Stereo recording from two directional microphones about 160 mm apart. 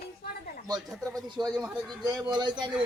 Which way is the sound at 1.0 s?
20° right (ahead or behind).